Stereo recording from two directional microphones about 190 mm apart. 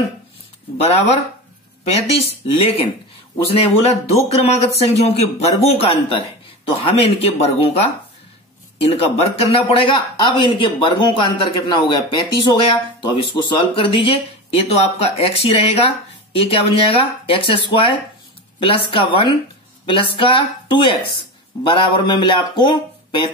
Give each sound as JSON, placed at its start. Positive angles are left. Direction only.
{"t": 0.7, "sound": "speech", "side_deg": 35}